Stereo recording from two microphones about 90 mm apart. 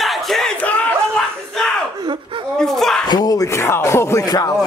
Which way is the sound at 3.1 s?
45° left (ahead or behind).